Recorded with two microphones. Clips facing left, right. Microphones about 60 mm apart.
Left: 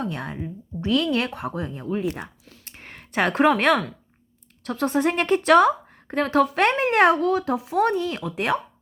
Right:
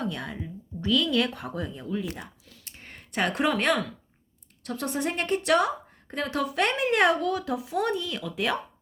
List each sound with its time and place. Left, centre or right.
0.1 s speech: left
1.3 s a woman's voice: left